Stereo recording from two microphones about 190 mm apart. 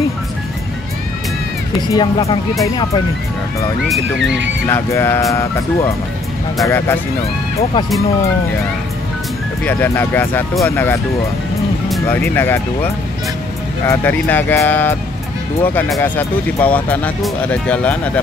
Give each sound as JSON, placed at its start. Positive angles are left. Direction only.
{"t": 1.9, "sound": "speech", "side_deg": 25}
{"t": 3.9, "sound": "speech", "side_deg": 0}
{"t": 4.6, "sound": "speech", "side_deg": 10}
{"t": 9.7, "sound": "speech", "side_deg": 10}
{"t": 12.1, "sound": "speech", "side_deg": 10}